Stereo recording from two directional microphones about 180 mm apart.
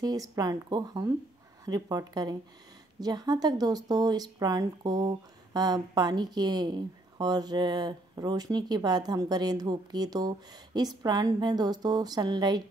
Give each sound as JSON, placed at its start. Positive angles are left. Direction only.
{"t": 0.0, "sound": "a woman's voice", "side_deg": -20}